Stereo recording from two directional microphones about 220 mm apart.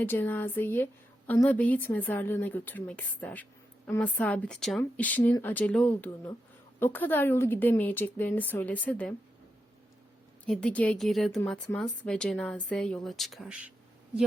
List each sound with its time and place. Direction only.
0.0 s speech: 10° left (ahead or behind)
10.4 s speech: 5° left (ahead or behind)